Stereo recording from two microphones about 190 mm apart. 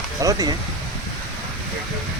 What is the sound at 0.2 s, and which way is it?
Speech, 20° right (ahead or behind).